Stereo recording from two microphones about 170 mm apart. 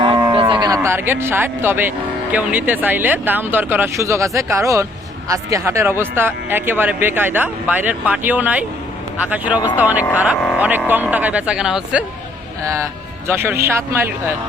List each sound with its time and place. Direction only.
0.0 s cattle: 30° right (ahead or behind); by 1.9 s 10° right (ahead or behind)
2.3 s speech: 10° right (ahead or behind)